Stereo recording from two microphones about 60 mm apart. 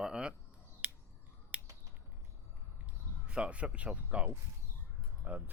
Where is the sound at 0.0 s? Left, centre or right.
Centre.